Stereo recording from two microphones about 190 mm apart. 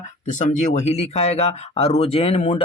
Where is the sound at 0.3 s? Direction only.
40° left (ahead or behind).